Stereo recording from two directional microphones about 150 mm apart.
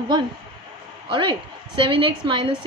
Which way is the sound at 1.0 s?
30° right (ahead or behind).